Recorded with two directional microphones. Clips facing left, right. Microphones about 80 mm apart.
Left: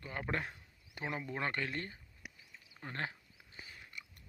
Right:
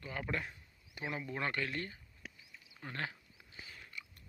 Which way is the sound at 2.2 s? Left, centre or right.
Centre.